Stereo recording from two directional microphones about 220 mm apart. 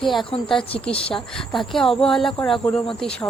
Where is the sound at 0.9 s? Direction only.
25° left (ahead or behind).